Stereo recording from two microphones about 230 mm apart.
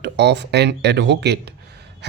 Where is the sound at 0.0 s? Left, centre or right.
Right.